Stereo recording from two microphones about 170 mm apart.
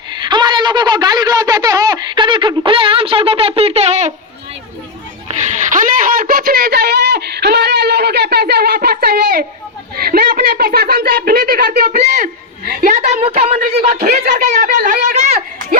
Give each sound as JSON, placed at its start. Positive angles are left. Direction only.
{"t": 0.1, "sound": "a woman's voice", "side_deg": -25}
{"t": 5.4, "sound": "a sound", "side_deg": -45}
{"t": 10.0, "sound": "speech", "side_deg": -60}
{"t": 11.9, "sound": "a woman's voice", "side_deg": -45}
{"t": 12.6, "sound": "a woman's voice", "side_deg": -55}
{"t": 13.2, "sound": "a woman's voice", "side_deg": -35}
{"t": 13.6, "sound": "speech", "side_deg": -60}
{"t": 14.4, "sound": "a woman's voice", "side_deg": -45}